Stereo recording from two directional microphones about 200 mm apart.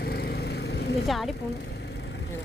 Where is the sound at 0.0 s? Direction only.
50° left (ahead or behind).